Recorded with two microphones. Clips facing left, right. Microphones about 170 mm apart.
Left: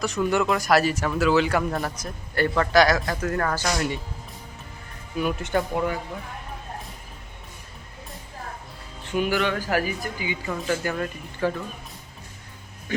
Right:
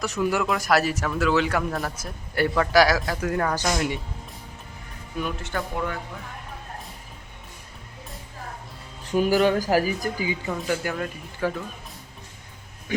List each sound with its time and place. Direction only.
0.0 s a man's voice: 5° right (ahead or behind)
5.4 s speech: 15° left (ahead or behind)
9.0 s speech: 40° right (ahead or behind)
10.5 s speech: 5° right (ahead or behind)